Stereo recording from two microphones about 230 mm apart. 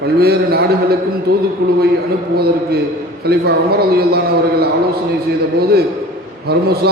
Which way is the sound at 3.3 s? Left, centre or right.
Right.